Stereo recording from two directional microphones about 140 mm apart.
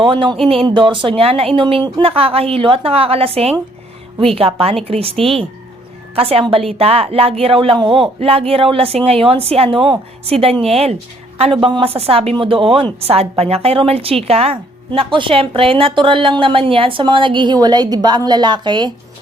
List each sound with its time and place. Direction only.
0.0 s a woman's voice: 35° right (ahead or behind)
5.1 s speech: centre (ahead or behind)
6.1 s a woman's voice: 45° right (ahead or behind)